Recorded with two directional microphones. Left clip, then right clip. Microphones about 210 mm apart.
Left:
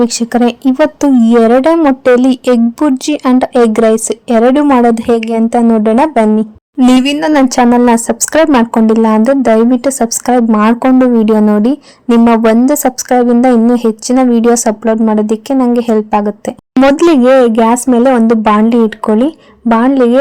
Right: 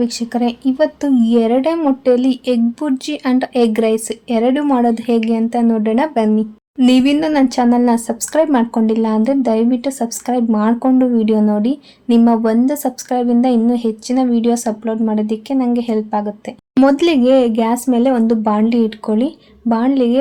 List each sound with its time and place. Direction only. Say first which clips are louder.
0.0 s speech: left 8 dB; 35° left (ahead or behind)